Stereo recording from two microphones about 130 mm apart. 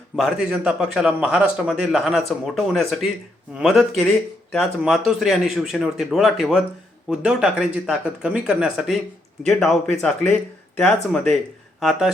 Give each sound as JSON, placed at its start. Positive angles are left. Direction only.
{"t": 0.2, "sound": "a man's voice", "side_deg": -5}